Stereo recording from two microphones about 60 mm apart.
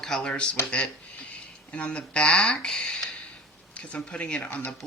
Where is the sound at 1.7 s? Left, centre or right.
Left.